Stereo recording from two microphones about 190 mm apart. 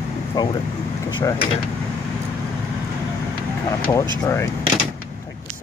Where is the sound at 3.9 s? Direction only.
15° left (ahead or behind).